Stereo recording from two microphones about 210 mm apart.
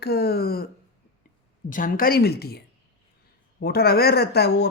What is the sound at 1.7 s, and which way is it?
Speech, 40° left (ahead or behind).